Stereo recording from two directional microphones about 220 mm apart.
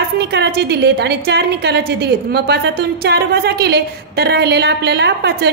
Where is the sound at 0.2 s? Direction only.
50° right (ahead or behind).